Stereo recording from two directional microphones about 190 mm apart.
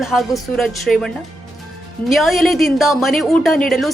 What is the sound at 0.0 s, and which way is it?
A woman's voice, centre (ahead or behind).